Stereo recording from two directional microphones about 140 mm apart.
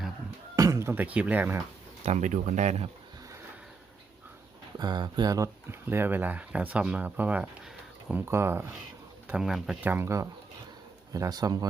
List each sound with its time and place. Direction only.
0.5 s speech: 25° right (ahead or behind)
2.0 s speech: 60° right (ahead or behind)
4.8 s speech: 30° right (ahead or behind)
5.9 s speech: 15° right (ahead or behind)
9.2 s speech: 5° right (ahead or behind)
9.8 s speech: 15° right (ahead or behind)